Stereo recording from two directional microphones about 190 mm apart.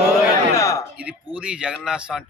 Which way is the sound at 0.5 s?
15° left (ahead or behind).